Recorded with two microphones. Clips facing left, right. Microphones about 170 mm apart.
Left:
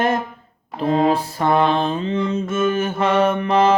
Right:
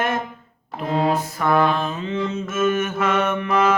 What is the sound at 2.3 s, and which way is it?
Mantra, 30° left (ahead or behind).